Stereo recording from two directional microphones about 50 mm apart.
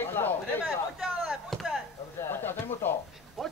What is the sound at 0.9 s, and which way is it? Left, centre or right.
Chop, centre.